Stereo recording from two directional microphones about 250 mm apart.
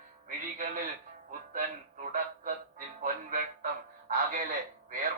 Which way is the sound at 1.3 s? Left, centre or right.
Right.